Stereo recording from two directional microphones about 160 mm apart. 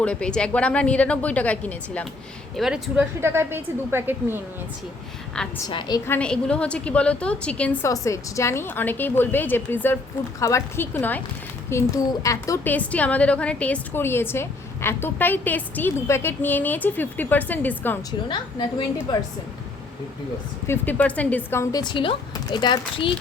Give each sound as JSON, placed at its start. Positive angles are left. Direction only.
{"t": 0.0, "sound": "a woman's voice", "side_deg": 5}
{"t": 2.6, "sound": "a woman's voice", "side_deg": 0}
{"t": 5.6, "sound": "speech", "side_deg": 25}
{"t": 6.1, "sound": "a woman's voice", "side_deg": 5}
{"t": 7.9, "sound": "a woman's voice", "side_deg": 20}
{"t": 19.1, "sound": "speech", "side_deg": 30}
{"t": 20.7, "sound": "speech", "side_deg": 10}